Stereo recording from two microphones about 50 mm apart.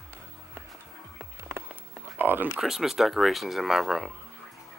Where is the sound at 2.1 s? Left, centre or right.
Right.